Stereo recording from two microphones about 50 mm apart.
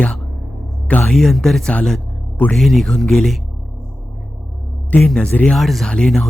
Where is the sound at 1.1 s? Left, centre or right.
Centre.